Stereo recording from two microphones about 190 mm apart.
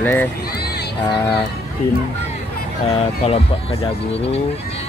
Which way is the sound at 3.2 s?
30° left (ahead or behind).